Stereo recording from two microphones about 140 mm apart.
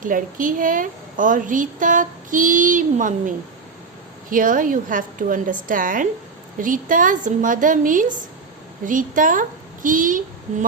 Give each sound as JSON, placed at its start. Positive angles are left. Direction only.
{"t": 0.0, "sound": "a woman's voice", "side_deg": -75}
{"t": 4.3, "sound": "a woman's voice", "side_deg": -75}